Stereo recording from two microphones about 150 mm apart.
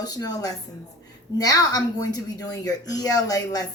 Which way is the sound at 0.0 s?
25° left (ahead or behind).